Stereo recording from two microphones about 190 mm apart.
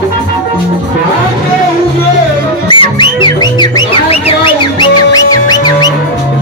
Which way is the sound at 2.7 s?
25° left (ahead or behind).